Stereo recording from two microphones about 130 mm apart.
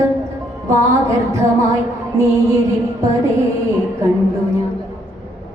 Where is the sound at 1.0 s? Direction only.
20° right (ahead or behind).